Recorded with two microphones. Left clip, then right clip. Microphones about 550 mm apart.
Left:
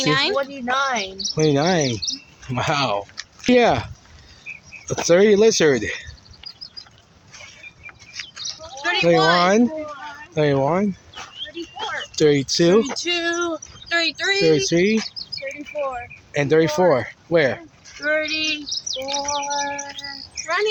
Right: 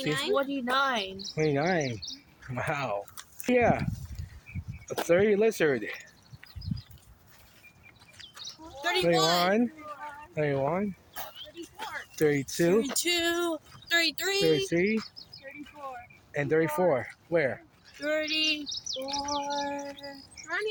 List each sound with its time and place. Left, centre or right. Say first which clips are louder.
0.0 s speech: left 10 dB; centre
0.3 s speech: left 6 dB; right
1.2 s speech: left 11 dB; right
5.0 s speech: left 10 dB; right
8.4 s bird: left 8 dB; right
9.0 s speech: left 10 dB; right
11.2 s dog: left 5 dB; right
12.1 s speech: left 10 dB; right
12.9 s speech: left 5 dB; right
14.5 s speech: left 9 dB; right
15.7 s speech: left 18 dB; centre
16.3 s speech: left 9 dB; right
18.0 s bird: left 7 dB; right
20.4 s a sound: left 11 dB; centre